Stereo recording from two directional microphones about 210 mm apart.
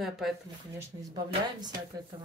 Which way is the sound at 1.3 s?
20° right (ahead or behind).